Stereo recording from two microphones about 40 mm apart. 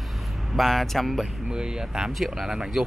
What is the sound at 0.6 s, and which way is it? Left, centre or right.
Speech, centre.